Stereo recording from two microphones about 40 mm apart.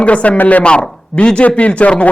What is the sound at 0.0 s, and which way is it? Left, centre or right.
A man's voice, left.